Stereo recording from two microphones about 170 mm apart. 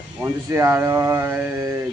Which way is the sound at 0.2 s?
15° right (ahead or behind).